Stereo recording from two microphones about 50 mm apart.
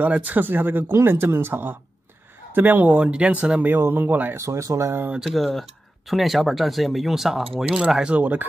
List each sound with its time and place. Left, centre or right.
0.0 s speech: right
0.9 s speech: right
2.9 s speech: right
3.6 s speech: right
4.4 s speech: right
5.2 s speech: centre
8.0 s speech: right